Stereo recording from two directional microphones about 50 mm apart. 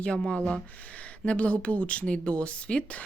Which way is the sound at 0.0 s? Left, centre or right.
Left.